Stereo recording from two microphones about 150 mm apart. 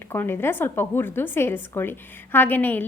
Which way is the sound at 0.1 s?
15° left (ahead or behind).